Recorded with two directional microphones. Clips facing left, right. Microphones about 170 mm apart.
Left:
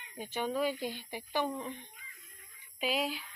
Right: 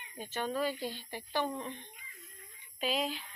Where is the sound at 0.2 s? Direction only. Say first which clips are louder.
Left 1 dB; 15° left (ahead or behind).